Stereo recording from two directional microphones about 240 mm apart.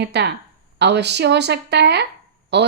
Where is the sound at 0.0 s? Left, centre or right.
Right.